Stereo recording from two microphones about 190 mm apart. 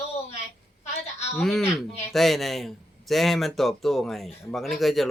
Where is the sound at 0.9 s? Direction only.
35° left (ahead or behind).